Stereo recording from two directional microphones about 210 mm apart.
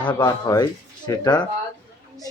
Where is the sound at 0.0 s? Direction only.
20° left (ahead or behind).